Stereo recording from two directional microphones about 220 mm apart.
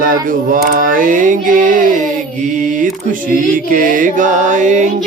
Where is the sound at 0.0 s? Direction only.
40° right (ahead or behind).